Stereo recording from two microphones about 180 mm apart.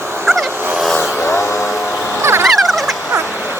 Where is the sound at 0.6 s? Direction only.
5° right (ahead or behind).